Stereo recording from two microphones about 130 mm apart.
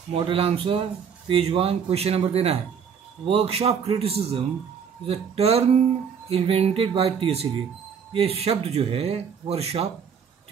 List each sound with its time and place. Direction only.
0.1 s speech: 45° right (ahead or behind)